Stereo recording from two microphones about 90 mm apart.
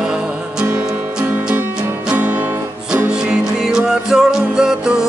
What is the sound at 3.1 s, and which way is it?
Music, 10° right (ahead or behind).